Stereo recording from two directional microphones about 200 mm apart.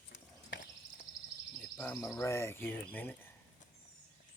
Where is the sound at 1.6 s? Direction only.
10° left (ahead or behind).